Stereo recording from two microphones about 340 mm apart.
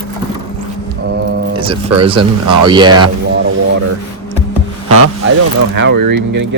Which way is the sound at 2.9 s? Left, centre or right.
Right.